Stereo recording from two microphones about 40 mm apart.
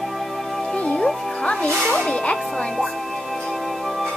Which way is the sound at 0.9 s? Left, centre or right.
Centre.